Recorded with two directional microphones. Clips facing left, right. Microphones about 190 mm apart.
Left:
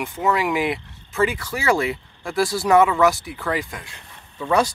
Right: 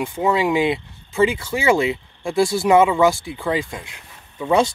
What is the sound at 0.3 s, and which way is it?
Speech, 25° right (ahead or behind).